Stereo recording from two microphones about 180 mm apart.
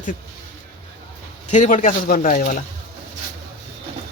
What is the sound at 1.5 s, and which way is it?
Speech, 45° left (ahead or behind).